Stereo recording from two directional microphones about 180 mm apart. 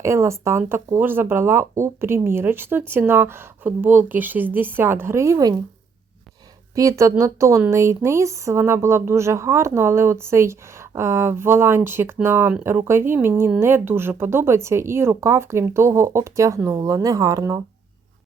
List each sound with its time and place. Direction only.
0.0 s speech: 15° right (ahead or behind)
6.7 s speech: 20° right (ahead or behind)